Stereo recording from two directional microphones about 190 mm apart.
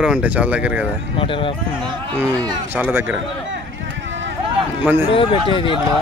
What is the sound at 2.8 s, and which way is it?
Speech, 10° right (ahead or behind).